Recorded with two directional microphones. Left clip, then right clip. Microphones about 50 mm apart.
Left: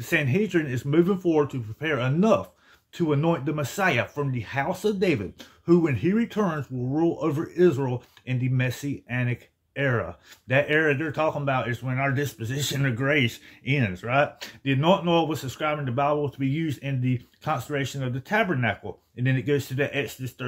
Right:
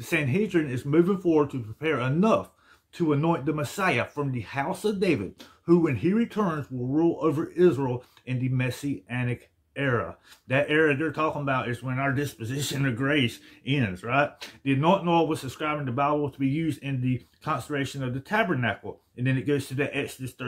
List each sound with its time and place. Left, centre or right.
0.0 s speech: left
12.2 s speech: left